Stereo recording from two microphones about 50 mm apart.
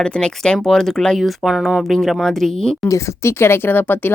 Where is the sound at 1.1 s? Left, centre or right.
Centre.